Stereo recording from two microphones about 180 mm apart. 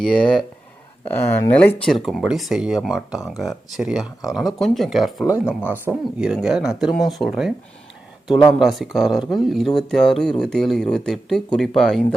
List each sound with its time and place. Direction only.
0.0 s speech: 5° left (ahead or behind)
8.5 s speech: centre (ahead or behind)